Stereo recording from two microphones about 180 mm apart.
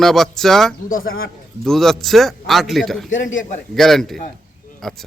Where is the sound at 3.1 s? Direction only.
90° left.